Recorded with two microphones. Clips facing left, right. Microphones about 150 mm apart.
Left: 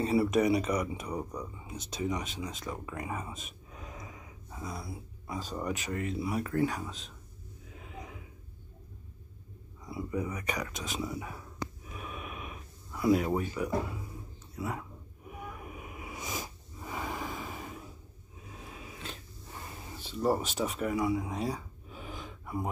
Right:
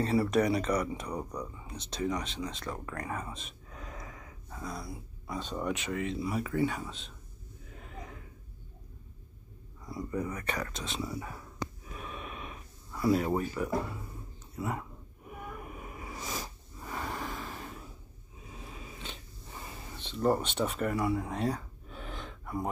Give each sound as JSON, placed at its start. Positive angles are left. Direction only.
{"t": 0.0, "sound": "speech", "side_deg": 10}
{"t": 3.8, "sound": "a sound", "side_deg": 20}
{"t": 4.6, "sound": "speech", "side_deg": 0}
{"t": 7.7, "sound": "snort", "side_deg": 5}
{"t": 9.8, "sound": "speech", "side_deg": 5}
{"t": 11.9, "sound": "a sound", "side_deg": 5}
{"t": 13.0, "sound": "speech", "side_deg": 0}
{"t": 15.3, "sound": "vehicle", "side_deg": 5}
{"t": 16.8, "sound": "a sound", "side_deg": 5}